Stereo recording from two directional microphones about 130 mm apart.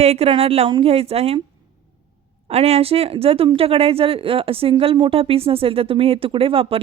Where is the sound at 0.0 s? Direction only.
50° right (ahead or behind).